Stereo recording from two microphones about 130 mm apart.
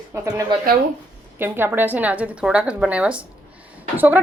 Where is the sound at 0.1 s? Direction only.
20° right (ahead or behind).